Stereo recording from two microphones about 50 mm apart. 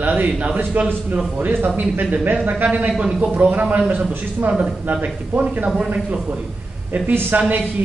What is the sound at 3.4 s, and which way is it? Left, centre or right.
Speech, right.